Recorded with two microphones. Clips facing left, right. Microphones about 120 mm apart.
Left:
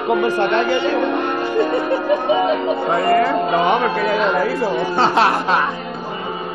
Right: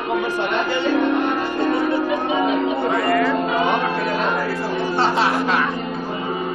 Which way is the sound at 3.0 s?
40° left (ahead or behind).